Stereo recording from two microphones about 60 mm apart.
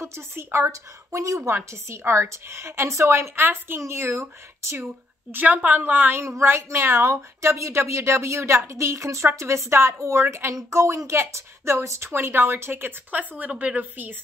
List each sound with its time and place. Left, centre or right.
0.0 s a woman's voice: right
0.7 s speech: right
1.5 s a woman's voice: right
5.3 s a woman's voice: right
6.2 s a woman's voice: right
7.4 s a woman's voice: right